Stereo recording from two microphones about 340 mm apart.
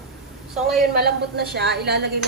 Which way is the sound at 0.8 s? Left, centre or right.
Right.